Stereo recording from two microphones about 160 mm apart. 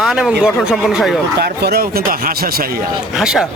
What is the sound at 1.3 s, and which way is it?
Speech, 85° right.